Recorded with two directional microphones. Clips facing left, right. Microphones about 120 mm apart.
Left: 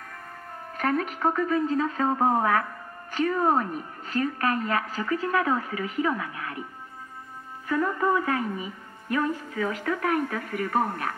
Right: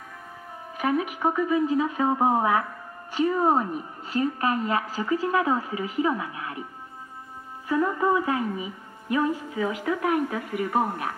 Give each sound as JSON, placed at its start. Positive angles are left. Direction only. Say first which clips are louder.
{"t": 0.7, "sound": "a woman's voice", "louder": "right 1 dB", "side_deg": -10}
{"t": 7.6, "sound": "a woman's voice", "louder": "right 1 dB", "side_deg": -15}